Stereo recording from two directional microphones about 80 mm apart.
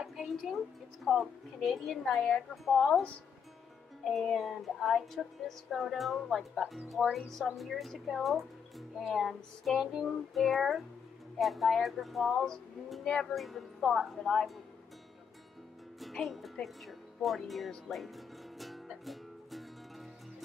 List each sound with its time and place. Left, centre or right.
0.0 s a sound: centre
1.0 s speech: centre
4.0 s speech: centre
13.0 s speech: centre
16.0 s speech: centre
16.6 s music: centre